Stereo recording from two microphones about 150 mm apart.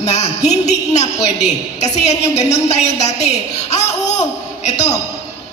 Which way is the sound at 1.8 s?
50° left (ahead or behind).